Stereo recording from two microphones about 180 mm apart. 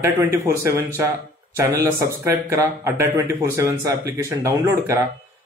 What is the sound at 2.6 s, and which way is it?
Speech, 15° right (ahead or behind).